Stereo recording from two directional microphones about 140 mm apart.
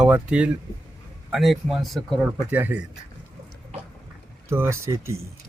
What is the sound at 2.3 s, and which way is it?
Speech, 10° right (ahead or behind).